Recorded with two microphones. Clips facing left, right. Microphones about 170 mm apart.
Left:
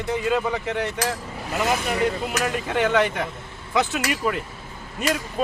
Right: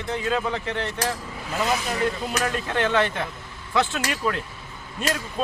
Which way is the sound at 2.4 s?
10° left (ahead or behind).